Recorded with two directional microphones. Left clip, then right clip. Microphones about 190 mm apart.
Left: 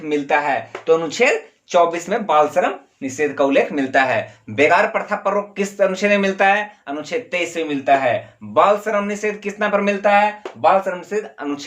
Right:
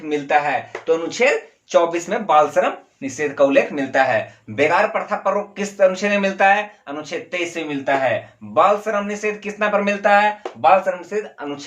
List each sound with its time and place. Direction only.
0.1 s speech: 35° left (ahead or behind)
1.7 s speech: 25° left (ahead or behind)
10.8 s speech: 40° left (ahead or behind)